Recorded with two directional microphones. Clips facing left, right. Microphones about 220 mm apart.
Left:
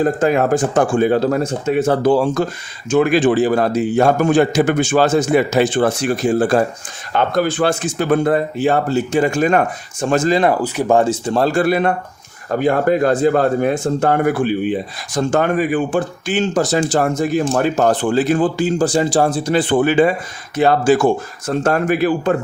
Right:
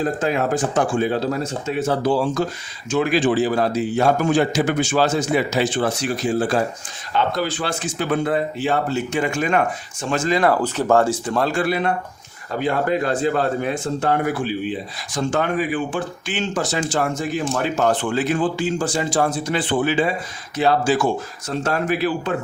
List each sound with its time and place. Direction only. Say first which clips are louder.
0.0 s speech: left 6 dB; 50° left (ahead or behind)
10.4 s speech: left 2 dB; 15° left (ahead or behind); by 22.4 s 50° left (ahead or behind)